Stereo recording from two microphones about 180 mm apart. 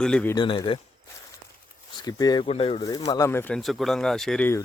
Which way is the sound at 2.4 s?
35° left (ahead or behind).